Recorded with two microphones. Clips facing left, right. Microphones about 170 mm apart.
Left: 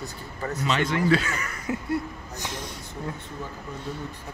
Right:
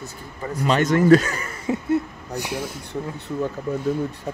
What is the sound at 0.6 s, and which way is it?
Speech, 45° right (ahead or behind).